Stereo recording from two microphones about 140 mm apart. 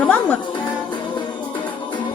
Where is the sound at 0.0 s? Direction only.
10° left (ahead or behind).